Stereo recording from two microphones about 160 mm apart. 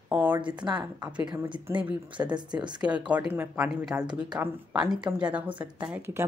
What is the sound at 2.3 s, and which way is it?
Speech, 25° right (ahead or behind).